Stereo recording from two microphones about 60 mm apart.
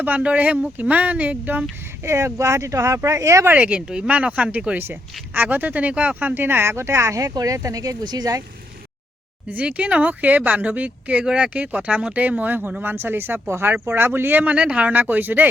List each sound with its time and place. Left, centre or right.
0.0 s speech: right
2.0 s speech: right
3.6 s speech: centre; by 8.4 s right
9.5 s speech: right
14.5 s speech: right